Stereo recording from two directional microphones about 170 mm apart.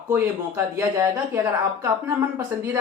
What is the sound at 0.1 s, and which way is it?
Speech, 15° right (ahead or behind).